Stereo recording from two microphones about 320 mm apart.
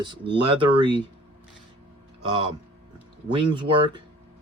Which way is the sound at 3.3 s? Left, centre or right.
Centre.